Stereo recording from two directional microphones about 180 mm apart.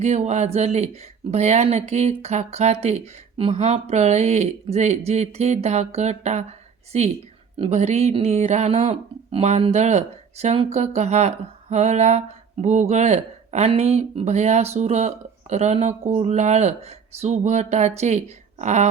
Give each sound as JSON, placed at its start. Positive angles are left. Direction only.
{"t": 0.0, "sound": "speech", "side_deg": -40}